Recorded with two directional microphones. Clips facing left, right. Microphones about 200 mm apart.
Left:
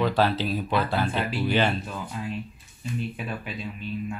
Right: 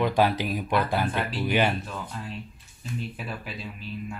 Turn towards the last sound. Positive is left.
turn(degrees=-5)  # may be behind; listen again after turning